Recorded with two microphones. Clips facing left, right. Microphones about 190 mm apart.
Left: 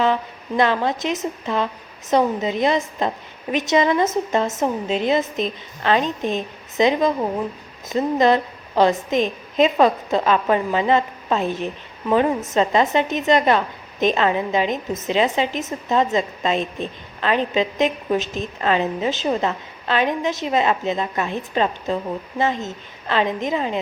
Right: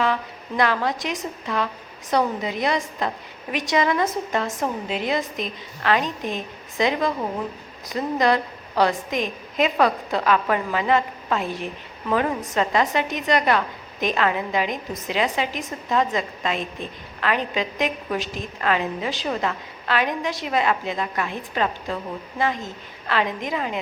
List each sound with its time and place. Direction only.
0.0 s a woman's voice: 25° left (ahead or behind)